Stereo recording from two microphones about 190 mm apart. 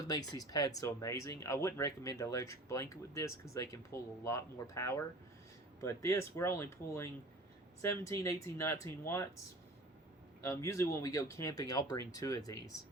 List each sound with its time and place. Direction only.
0.1 s speech: 20° left (ahead or behind)
10.4 s speech: 15° left (ahead or behind)